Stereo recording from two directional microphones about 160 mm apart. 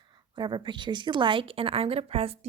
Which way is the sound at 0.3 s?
30° right (ahead or behind).